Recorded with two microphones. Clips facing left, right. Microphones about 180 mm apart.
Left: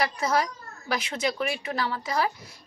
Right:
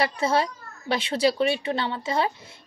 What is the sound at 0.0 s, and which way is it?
A woman's voice, 30° right (ahead or behind).